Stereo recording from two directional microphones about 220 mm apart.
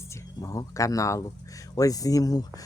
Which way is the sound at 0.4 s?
15° left (ahead or behind).